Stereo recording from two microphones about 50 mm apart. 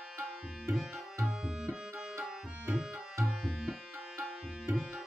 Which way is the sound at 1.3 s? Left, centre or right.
Centre.